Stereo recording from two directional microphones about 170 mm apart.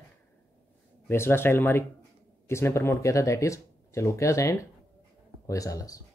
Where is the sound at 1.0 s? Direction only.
15° left (ahead or behind).